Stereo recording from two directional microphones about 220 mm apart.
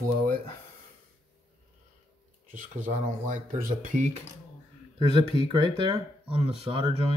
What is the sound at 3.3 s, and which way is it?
Speech, 35° right (ahead or behind).